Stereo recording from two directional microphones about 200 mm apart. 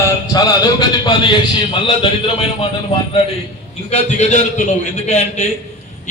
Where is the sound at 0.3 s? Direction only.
20° left (ahead or behind).